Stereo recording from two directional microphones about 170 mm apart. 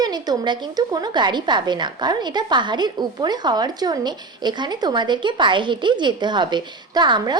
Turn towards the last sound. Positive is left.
turn(degrees=-25)  # may be behind; listen again after turning